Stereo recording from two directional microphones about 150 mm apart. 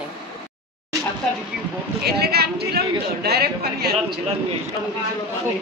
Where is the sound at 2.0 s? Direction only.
90° right.